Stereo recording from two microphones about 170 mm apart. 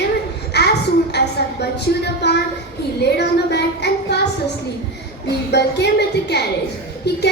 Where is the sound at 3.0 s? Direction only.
80° left.